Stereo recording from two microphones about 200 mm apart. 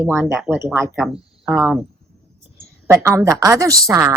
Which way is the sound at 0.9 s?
Centre (ahead or behind).